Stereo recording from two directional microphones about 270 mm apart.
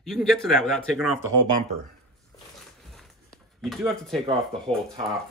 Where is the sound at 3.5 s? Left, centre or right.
Centre.